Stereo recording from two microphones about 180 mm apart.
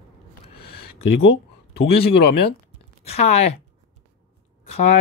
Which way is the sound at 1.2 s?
65° left (ahead or behind).